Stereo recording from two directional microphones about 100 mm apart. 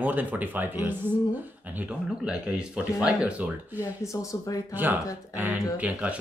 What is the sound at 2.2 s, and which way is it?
Speech, 10° right (ahead or behind).